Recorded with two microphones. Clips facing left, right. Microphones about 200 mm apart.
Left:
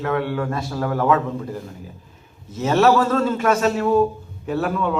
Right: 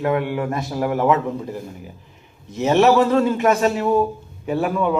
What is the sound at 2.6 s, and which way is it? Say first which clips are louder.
A man's voice: right 2 dB; 20° right (ahead or behind).